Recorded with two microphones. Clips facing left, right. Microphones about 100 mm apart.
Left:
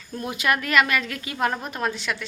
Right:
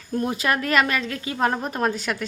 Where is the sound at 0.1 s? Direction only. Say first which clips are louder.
Right 2 dB; 35° right (ahead or behind).